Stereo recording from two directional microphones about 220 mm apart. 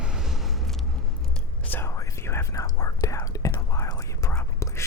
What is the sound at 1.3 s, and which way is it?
Whispering, 10° left (ahead or behind).